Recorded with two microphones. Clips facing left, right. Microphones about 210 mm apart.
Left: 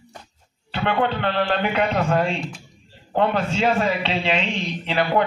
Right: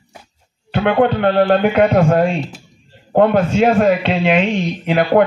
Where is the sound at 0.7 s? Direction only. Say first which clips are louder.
Right 8 dB; 50° right (ahead or behind).